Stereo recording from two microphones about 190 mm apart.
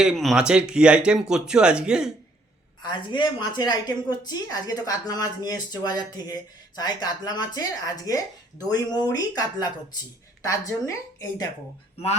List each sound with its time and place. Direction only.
0.0 s speech: centre (ahead or behind)
2.8 s a woman's voice: 25° left (ahead or behind)